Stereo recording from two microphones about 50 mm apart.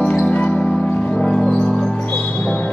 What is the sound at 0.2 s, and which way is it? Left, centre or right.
Music, left.